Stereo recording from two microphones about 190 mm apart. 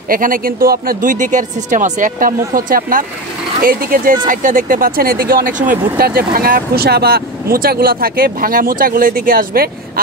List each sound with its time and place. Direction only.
0.1 s speech: 50° right (ahead or behind)